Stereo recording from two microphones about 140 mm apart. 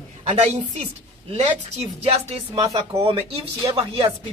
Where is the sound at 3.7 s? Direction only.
40° right (ahead or behind).